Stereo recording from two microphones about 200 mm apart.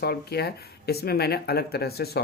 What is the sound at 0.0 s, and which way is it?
Speech, 55° left (ahead or behind).